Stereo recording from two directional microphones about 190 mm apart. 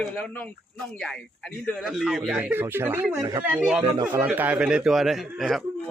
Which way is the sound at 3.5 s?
5° right (ahead or behind).